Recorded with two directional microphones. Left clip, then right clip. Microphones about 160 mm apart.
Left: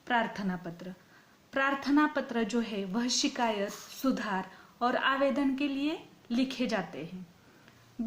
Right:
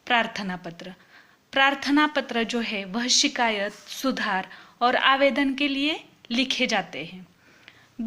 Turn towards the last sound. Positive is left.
turn(degrees=-10)  # may be behind; listen again after turning